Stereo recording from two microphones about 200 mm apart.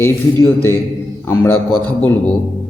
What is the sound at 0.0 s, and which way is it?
A man's voice, 10° left (ahead or behind).